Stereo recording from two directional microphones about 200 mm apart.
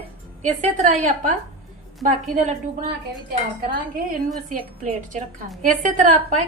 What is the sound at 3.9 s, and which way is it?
Speech, 45° right (ahead or behind).